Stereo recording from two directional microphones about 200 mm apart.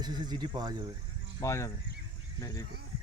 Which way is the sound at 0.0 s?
20° right (ahead or behind).